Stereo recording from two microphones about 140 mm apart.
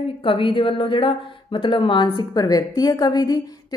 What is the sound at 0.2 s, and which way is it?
A woman's voice, 40° left (ahead or behind).